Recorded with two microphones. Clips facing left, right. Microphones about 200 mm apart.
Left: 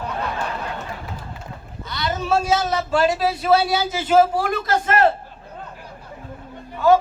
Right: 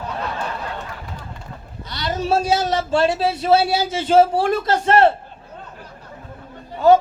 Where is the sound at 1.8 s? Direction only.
35° right (ahead or behind).